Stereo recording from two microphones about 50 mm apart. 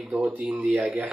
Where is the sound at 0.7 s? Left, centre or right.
Right.